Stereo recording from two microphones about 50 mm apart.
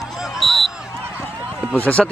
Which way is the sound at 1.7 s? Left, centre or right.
Left.